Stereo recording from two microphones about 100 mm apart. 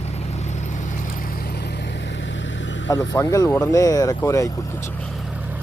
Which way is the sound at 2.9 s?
35° left (ahead or behind).